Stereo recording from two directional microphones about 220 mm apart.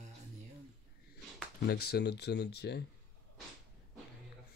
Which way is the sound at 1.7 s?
45° left (ahead or behind).